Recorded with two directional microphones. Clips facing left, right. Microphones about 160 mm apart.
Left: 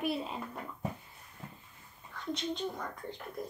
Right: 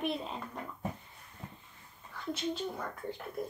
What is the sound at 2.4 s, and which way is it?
Speech, 5° right (ahead or behind).